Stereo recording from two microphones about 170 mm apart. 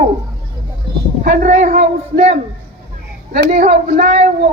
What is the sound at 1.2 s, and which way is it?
A man's voice, 45° right (ahead or behind).